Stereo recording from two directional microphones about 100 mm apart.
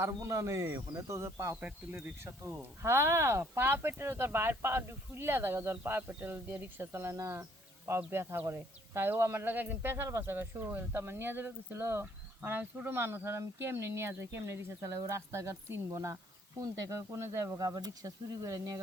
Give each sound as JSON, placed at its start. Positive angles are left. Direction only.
{"t": 0.2, "sound": "speech", "side_deg": -30}
{"t": 1.6, "sound": "a man's voice", "side_deg": -20}